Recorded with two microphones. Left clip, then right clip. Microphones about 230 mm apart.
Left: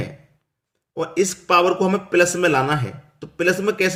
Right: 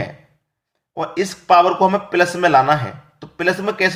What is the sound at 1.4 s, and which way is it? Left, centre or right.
Speech, centre.